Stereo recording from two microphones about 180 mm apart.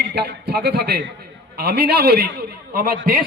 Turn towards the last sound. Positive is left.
turn(degrees=-55)  # may be behind; listen again after turning